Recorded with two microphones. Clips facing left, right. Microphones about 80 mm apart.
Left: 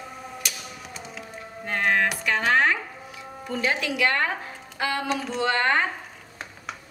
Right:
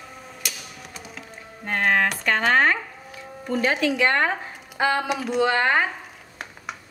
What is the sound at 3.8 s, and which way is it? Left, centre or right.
Speech, right.